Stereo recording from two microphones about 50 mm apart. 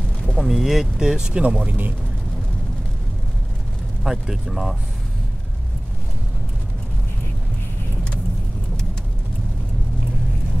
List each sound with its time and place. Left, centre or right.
0.4 s speech: centre
0.9 s speech: centre
1.5 s speech: right
4.0 s speech: centre